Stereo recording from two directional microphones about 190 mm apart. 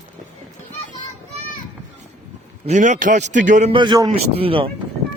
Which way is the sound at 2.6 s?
40° right (ahead or behind).